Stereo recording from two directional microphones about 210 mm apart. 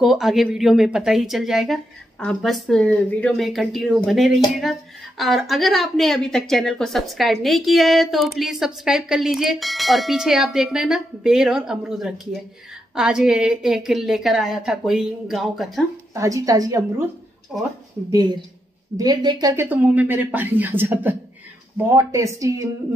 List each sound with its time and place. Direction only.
0.0 s a woman's voice: centre (ahead or behind)
16.2 s speech: 15° right (ahead or behind)
17.5 s a woman's voice: centre (ahead or behind)
18.1 s speech: 20° right (ahead or behind)